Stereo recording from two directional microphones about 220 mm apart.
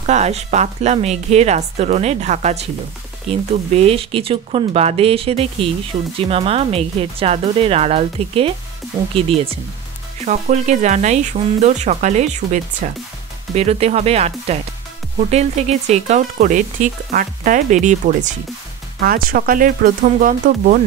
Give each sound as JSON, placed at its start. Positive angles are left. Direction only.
{"t": 0.0, "sound": "speech", "side_deg": -30}